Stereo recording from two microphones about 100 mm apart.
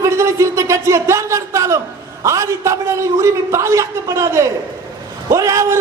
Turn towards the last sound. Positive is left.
turn(degrees=-30)  # may be behind; listen again after turning